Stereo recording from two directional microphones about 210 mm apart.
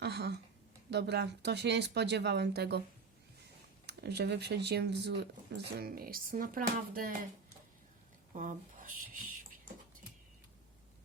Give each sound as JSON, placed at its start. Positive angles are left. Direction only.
{"t": 0.0, "sound": "a sound", "side_deg": -55}
{"t": 0.9, "sound": "speech", "side_deg": -50}
{"t": 3.8, "sound": "speech", "side_deg": -50}
{"t": 8.3, "sound": "speech", "side_deg": -35}